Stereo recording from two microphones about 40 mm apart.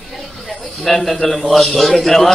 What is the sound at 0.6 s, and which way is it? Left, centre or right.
Speech, centre.